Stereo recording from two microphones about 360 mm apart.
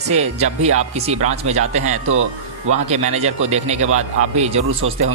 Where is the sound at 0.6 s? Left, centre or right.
Centre.